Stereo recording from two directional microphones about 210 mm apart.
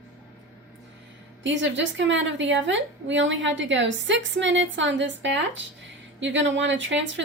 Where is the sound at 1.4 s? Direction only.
60° right (ahead or behind).